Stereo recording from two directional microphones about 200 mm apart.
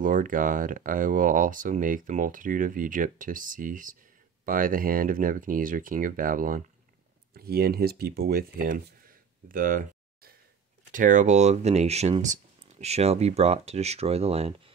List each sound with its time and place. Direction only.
0.0 s speech: 40° right (ahead or behind)
9.5 s a sound: 45° right (ahead or behind)
10.9 s speech: 40° right (ahead or behind)